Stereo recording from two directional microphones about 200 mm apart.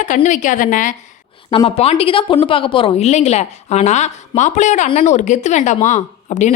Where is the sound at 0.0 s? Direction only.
40° left (ahead or behind).